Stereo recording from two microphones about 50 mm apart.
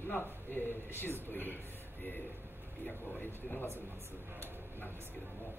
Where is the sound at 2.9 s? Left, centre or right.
Left.